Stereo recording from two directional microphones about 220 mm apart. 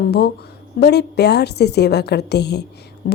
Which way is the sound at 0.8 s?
50° left (ahead or behind).